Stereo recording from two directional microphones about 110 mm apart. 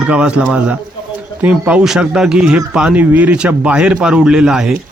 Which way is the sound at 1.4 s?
10° right (ahead or behind).